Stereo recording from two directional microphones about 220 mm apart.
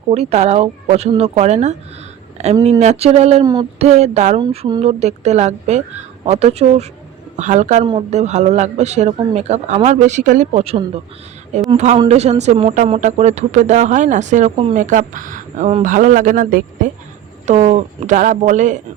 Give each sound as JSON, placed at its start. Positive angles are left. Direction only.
{"t": 0.1, "sound": "speech", "side_deg": -30}